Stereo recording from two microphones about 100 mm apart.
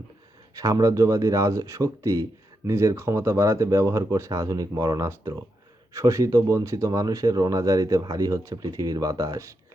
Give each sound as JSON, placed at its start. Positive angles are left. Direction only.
{"t": 0.5, "sound": "speech", "side_deg": -35}